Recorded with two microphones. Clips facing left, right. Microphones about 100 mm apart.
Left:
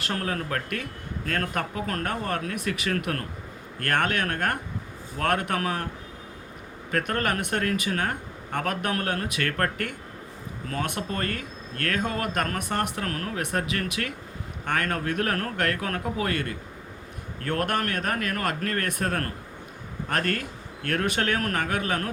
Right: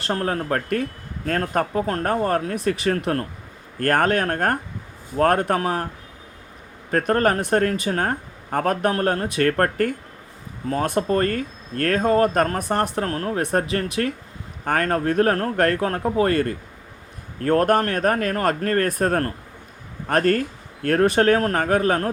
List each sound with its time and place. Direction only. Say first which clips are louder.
0.0 s speech: right 6 dB; 35° right (ahead or behind)
6.9 s speech: right 7 dB; 35° right (ahead or behind)